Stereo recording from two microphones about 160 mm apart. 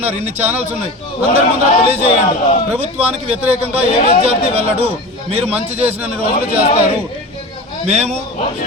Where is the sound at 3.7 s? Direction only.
40° right (ahead or behind).